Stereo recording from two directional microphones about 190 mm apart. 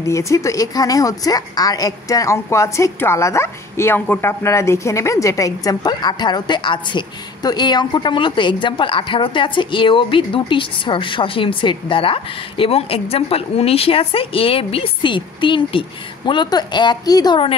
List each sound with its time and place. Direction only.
0.0 s a woman's voice: 15° left (ahead or behind)